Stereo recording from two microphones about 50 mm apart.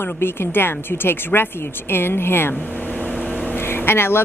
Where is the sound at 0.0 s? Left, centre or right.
Left.